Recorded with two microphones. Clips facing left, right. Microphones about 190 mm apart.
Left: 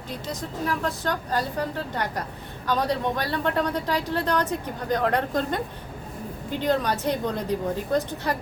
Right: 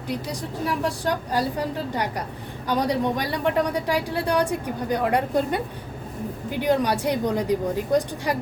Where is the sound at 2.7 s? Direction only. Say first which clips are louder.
Right 2 dB; 15° right (ahead or behind).